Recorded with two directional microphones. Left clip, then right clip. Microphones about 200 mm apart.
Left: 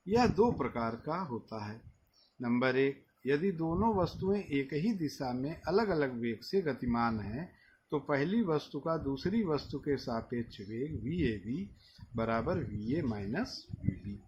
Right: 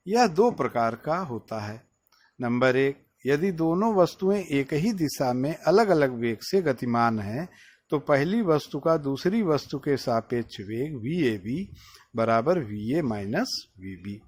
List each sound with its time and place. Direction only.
0.1 s speech: 55° right (ahead or behind)